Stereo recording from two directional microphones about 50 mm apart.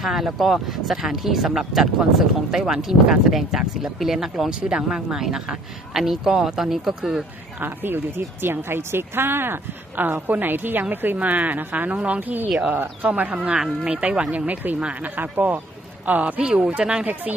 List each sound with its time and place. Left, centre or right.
0.0 s speech: centre
7.6 s speech: right
11.2 s speech: right
13.1 s speech: right
16.6 s speech: centre